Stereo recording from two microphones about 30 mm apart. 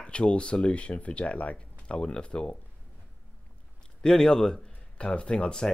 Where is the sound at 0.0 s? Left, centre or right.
Left.